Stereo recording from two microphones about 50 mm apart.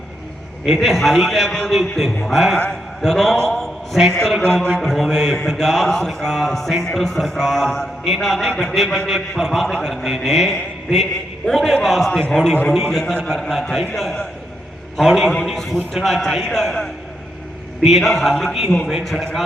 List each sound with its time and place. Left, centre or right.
0.6 s a man's voice: centre
4.4 s a man's voice: centre
17.9 s a man's voice: centre